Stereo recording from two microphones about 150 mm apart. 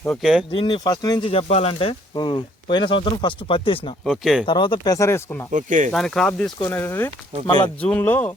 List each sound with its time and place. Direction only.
0.2 s speech: centre (ahead or behind)
0.5 s speech: 30° left (ahead or behind)
1.3 s speech: 40° left (ahead or behind)
4.0 s speech: centre (ahead or behind)
4.4 s speech: 30° left (ahead or behind)
5.5 s speech: 55° right (ahead or behind)
5.9 s speech: 5° left (ahead or behind)
6.7 s speech: 15° left (ahead or behind)